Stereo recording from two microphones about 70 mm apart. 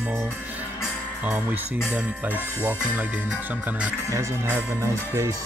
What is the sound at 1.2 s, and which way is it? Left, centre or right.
Music, right.